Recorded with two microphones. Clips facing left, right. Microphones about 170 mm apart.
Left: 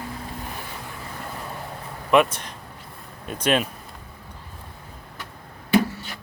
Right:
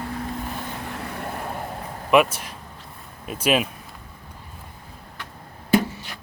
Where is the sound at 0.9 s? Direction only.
60° right (ahead or behind).